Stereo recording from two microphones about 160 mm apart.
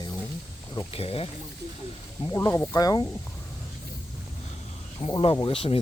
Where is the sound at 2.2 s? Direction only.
20° left (ahead or behind).